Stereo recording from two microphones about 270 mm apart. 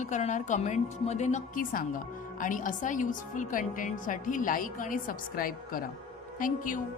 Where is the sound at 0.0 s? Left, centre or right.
Left.